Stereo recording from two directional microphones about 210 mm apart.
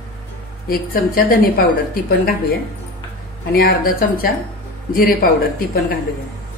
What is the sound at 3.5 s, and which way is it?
Speech, 45° left (ahead or behind).